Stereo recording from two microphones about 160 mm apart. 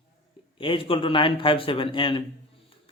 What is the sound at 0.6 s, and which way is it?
Speech, 35° left (ahead or behind).